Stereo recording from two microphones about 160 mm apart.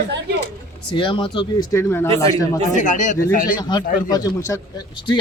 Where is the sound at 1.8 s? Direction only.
15° left (ahead or behind).